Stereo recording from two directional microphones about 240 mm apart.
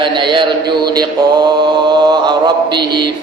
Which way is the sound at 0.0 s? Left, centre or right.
Centre.